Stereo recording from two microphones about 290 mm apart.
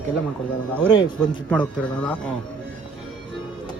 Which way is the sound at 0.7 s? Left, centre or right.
Centre.